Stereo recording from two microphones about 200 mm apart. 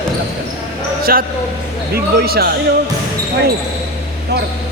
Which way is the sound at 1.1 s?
50° right (ahead or behind).